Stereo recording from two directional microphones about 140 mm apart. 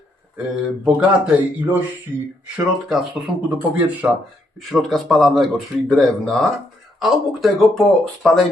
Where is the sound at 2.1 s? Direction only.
15° right (ahead or behind).